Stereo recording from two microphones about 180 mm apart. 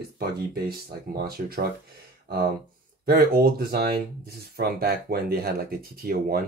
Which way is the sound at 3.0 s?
55° right (ahead or behind).